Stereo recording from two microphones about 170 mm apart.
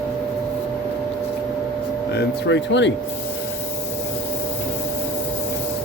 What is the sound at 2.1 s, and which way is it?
Speech, 90° left.